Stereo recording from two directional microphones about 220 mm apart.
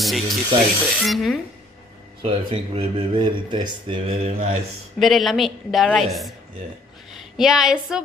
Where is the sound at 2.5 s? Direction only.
20° right (ahead or behind).